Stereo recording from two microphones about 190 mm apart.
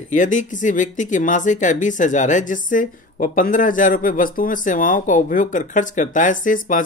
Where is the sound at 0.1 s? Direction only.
40° left (ahead or behind).